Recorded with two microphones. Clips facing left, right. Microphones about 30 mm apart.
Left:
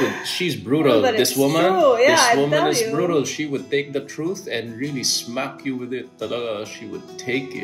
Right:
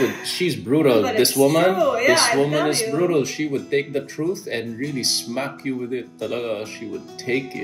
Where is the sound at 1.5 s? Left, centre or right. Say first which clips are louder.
Right 1 dB; left.